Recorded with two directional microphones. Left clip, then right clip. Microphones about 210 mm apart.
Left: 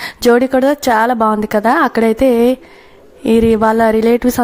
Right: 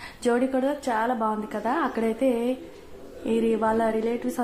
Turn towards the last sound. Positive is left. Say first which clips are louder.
# left 14 dB
turn(degrees=45)  # may be behind; listen again after turning